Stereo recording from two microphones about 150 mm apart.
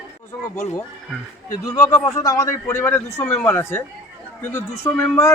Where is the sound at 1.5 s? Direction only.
20° left (ahead or behind).